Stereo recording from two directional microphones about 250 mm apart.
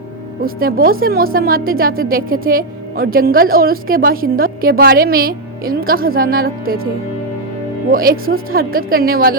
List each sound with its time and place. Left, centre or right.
0.4 s a woman's voice: right
7.9 s a woman's voice: right